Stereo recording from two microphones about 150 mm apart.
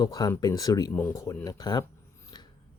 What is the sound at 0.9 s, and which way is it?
Speech, 10° left (ahead or behind).